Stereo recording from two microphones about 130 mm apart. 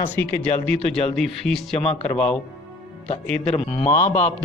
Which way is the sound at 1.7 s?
50° left (ahead or behind).